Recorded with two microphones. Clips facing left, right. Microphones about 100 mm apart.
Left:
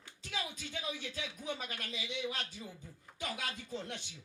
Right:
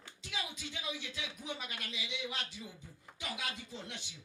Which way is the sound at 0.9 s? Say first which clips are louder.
Left 1 dB; 45° left (ahead or behind).